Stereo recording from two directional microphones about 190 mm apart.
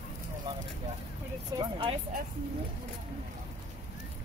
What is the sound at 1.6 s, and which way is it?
Speech, 30° right (ahead or behind).